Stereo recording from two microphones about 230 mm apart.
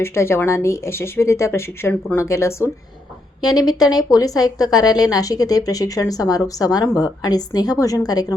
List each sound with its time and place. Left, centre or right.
0.0 s a woman's voice: centre